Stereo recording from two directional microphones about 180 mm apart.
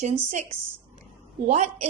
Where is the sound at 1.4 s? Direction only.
40° right (ahead or behind).